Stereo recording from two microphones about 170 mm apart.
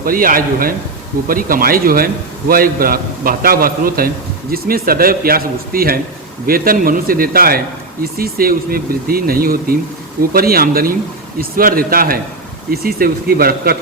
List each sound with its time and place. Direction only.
0.0 s a man's voice: 55° right (ahead or behind)